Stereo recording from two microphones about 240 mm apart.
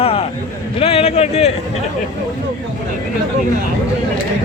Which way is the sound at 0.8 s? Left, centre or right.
Left.